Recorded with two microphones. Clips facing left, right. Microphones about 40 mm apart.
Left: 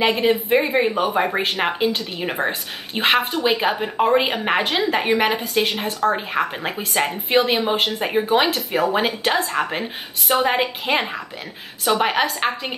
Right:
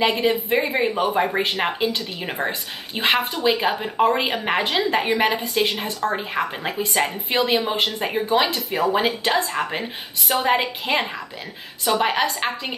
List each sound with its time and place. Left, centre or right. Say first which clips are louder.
0.0 s a woman's voice: left 2 dB; centre